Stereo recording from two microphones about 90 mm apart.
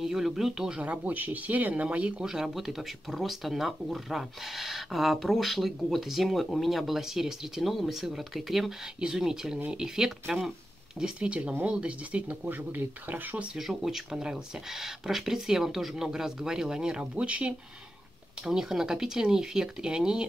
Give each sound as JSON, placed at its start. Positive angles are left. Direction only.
{"t": 0.0, "sound": "speech", "side_deg": -5}
{"t": 13.6, "sound": "speech", "side_deg": -5}